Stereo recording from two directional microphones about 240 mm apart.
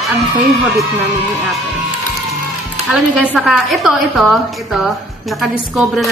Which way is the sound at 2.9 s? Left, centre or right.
Centre.